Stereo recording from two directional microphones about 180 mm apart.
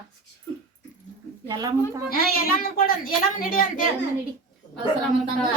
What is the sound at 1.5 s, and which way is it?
Speech, 20° right (ahead or behind).